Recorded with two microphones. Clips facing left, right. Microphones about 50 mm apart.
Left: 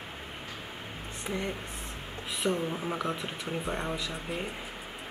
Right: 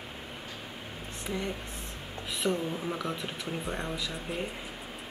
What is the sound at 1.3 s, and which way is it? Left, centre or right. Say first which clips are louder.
Speech: even; centre.